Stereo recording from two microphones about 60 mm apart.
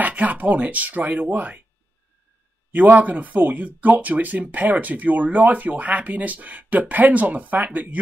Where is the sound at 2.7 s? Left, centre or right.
Right.